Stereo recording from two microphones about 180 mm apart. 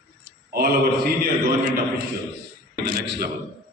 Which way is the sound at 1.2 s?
60° right (ahead or behind).